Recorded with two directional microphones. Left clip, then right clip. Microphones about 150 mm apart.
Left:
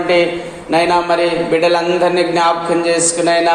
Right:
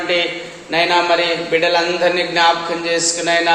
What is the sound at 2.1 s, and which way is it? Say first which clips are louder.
A man's voice: left 1 dB; 35° left (ahead or behind).